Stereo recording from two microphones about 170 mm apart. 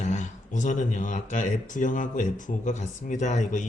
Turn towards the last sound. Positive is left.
turn(degrees=45)  # may be behind; listen again after turning